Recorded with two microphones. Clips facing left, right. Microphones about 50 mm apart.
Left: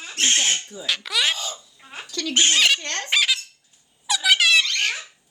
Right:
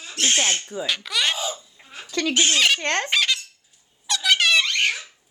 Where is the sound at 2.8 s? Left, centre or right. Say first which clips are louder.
Right 6 dB; right.